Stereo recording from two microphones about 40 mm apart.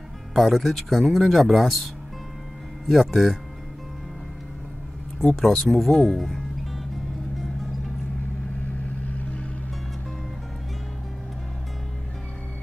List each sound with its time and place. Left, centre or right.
0.3 s speech: centre
2.9 s speech: centre
5.3 s speech: centre
8.7 s vehicle: left